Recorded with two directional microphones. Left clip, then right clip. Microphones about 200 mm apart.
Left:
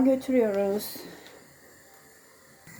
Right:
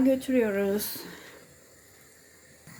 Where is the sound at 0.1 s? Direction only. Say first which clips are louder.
Left 1 dB; 10° right (ahead or behind).